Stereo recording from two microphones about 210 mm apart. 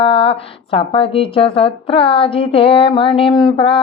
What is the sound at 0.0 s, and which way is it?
Mantra, 25° left (ahead or behind).